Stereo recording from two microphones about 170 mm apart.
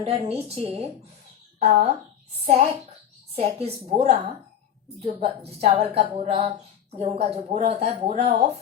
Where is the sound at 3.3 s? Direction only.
35° right (ahead or behind).